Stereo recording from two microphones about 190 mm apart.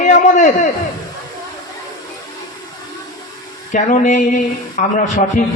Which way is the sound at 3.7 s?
40° left (ahead or behind).